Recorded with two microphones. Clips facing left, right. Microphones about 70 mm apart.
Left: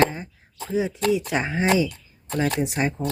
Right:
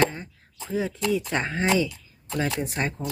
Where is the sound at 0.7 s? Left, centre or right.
Centre.